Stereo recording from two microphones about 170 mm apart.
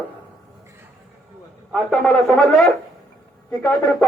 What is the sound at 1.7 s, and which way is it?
A man's voice, centre (ahead or behind).